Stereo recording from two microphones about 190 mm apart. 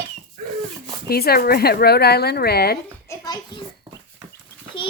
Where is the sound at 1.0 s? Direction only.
55° left (ahead or behind).